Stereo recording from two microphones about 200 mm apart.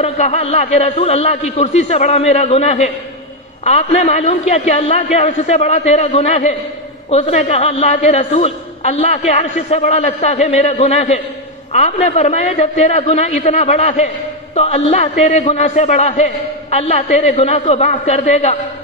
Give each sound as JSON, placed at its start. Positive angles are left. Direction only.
{"t": 0.0, "sound": "a man's voice", "side_deg": 30}